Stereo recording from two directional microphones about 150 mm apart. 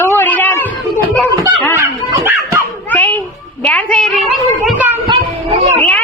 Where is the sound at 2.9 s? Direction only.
10° left (ahead or behind).